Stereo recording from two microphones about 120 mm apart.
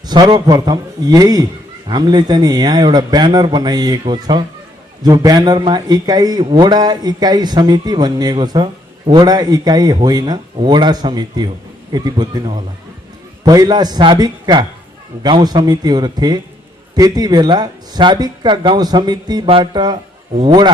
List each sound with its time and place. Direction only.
0.1 s a man's voice: 40° right (ahead or behind)
19.5 s a man's voice: 50° right (ahead or behind)